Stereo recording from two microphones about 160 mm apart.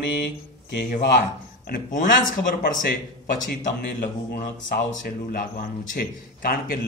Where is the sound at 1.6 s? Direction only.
60° left (ahead or behind).